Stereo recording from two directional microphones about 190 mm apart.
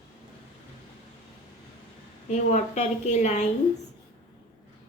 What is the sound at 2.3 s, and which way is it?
A woman's voice, 40° left (ahead or behind).